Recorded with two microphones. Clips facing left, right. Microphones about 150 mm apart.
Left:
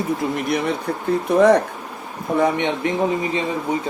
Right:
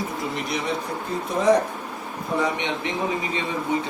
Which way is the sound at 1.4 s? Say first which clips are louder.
Left 5 dB; 65° left (ahead or behind).